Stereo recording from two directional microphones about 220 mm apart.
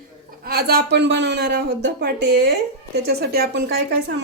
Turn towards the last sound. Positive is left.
turn(degrees=-45)  # may be behind; listen again after turning